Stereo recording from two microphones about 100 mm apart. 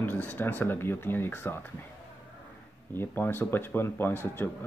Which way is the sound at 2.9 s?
20° left (ahead or behind).